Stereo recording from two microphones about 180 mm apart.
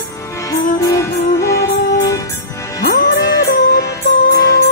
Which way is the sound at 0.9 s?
15° left (ahead or behind).